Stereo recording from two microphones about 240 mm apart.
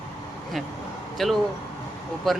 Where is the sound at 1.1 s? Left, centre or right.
Centre.